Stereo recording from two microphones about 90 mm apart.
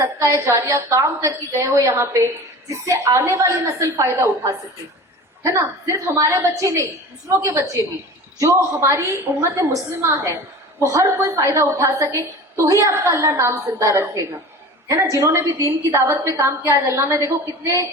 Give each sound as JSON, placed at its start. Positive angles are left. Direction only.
{"t": 0.0, "sound": "a woman's voice", "side_deg": -35}